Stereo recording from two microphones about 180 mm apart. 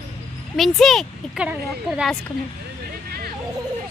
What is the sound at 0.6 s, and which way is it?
Speech, centre (ahead or behind).